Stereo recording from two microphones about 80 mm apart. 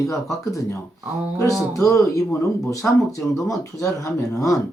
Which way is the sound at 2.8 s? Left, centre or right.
Left.